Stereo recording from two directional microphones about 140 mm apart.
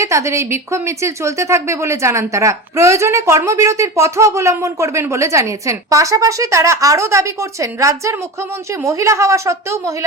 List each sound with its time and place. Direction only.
0.0 s a woman's voice: 20° right (ahead or behind)